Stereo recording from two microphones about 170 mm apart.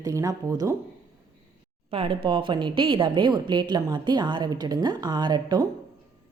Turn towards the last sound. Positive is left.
turn(degrees=-25)  # may be behind; listen again after turning